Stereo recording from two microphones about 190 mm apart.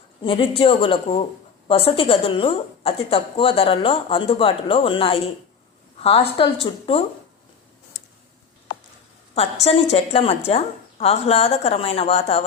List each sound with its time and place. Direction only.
0.3 s speech: 30° left (ahead or behind)
9.6 s a woman's voice: 30° left (ahead or behind)